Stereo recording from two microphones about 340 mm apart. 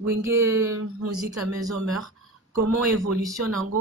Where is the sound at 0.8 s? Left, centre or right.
Right.